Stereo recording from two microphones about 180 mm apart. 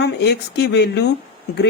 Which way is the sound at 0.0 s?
70° left (ahead or behind).